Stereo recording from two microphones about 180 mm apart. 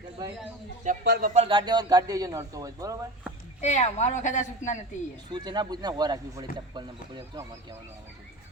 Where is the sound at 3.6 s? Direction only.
40° left (ahead or behind).